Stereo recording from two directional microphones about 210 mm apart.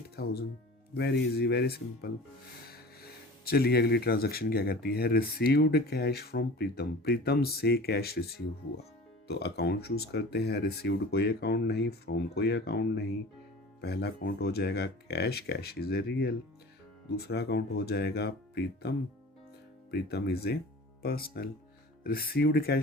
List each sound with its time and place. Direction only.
0.2 s speech: 50° left (ahead or behind)
9.2 s speech: 50° left (ahead or behind)